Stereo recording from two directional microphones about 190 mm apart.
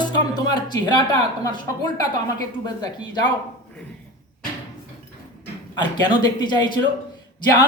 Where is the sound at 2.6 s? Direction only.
20° left (ahead or behind).